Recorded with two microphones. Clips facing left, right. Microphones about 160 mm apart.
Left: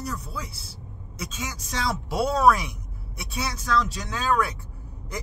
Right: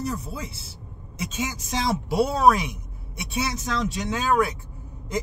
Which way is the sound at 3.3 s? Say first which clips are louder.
Left 1 dB; 25° right (ahead or behind).